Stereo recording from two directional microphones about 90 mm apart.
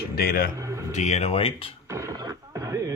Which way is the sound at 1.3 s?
90° left.